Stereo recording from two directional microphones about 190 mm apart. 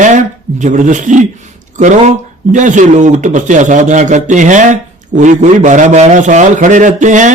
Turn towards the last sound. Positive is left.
turn(degrees=-40)  # may be behind; listen again after turning